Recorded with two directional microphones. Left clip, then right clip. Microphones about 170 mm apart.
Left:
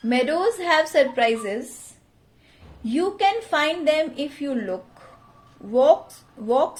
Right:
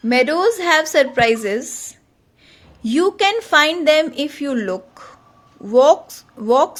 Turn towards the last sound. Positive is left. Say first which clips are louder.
# right 6 dB
turn(degrees=-50)  # may be behind; listen again after turning